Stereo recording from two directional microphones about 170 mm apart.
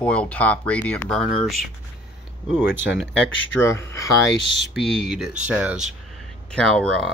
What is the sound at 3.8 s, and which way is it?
Speech, 15° left (ahead or behind).